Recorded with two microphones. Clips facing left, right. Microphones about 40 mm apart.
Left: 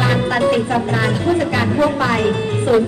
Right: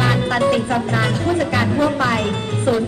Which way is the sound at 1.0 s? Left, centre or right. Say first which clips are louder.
Left 2 dB; centre.